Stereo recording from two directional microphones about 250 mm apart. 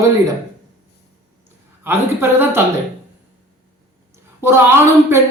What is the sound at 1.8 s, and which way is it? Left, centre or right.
Speech, centre.